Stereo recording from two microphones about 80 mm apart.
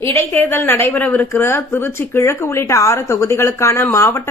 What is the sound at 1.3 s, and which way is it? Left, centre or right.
Speech, left.